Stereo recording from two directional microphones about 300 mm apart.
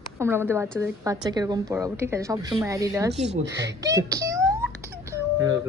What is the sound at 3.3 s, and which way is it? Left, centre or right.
Speech, right.